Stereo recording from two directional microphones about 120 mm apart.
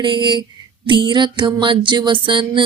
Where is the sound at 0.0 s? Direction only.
40° right (ahead or behind).